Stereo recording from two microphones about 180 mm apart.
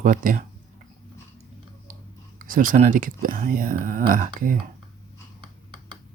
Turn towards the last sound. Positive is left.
turn(degrees=-50)  # may be behind; listen again after turning